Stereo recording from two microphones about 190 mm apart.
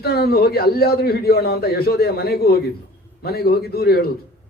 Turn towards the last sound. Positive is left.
turn(degrees=55)  # may be behind; listen again after turning